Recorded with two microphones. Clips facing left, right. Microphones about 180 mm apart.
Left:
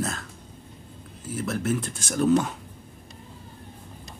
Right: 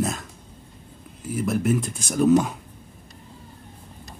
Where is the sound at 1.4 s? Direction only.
5° right (ahead or behind).